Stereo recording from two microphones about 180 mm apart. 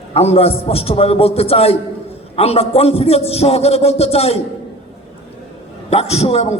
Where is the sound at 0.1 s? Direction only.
35° left (ahead or behind).